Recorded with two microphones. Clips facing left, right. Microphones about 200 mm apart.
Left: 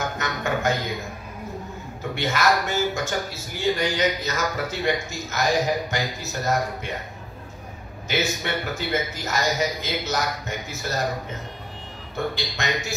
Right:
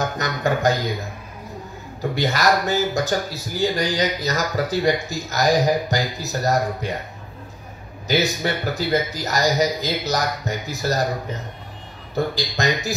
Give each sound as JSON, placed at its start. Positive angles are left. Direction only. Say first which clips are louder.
{"t": 0.2, "sound": "a sound", "louder": "right 5 dB", "side_deg": -35}
{"t": 2.0, "sound": "a man's voice", "louder": "right 3 dB", "side_deg": -35}
{"t": 8.1, "sound": "a man's voice", "louder": "right 4 dB", "side_deg": -35}
{"t": 12.4, "sound": "a man's voice", "louder": "right 5 dB", "side_deg": -35}